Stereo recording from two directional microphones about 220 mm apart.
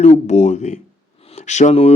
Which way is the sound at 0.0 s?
30° left (ahead or behind).